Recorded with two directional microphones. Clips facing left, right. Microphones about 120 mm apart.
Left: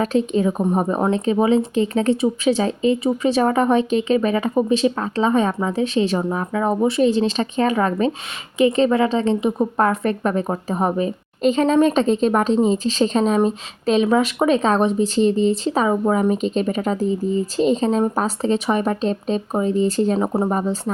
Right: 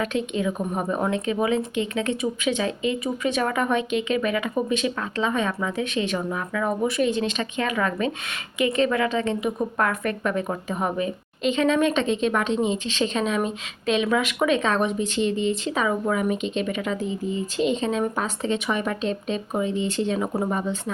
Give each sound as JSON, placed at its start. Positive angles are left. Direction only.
{"t": 0.0, "sound": "a woman's voice", "side_deg": 35}